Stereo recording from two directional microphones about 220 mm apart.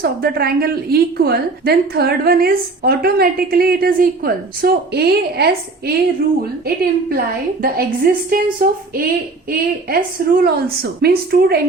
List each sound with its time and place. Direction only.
0.0 s a woman's voice: 45° right (ahead or behind)